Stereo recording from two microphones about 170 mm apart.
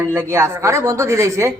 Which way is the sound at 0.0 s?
15° right (ahead or behind).